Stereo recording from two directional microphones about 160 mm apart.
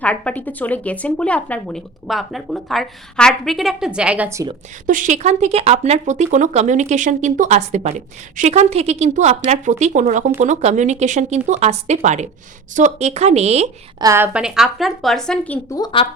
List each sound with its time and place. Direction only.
0.0 s a woman's voice: 10° left (ahead or behind); by 4.4 s 15° right (ahead or behind)
4.9 s speech: 55° right (ahead or behind)
14.0 s a woman's voice: 20° right (ahead or behind)
14.3 s a woman's voice: 5° right (ahead or behind)
15.7 s speech: 30° left (ahead or behind)